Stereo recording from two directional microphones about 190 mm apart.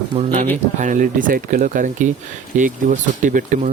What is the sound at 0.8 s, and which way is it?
Speech, 40° right (ahead or behind).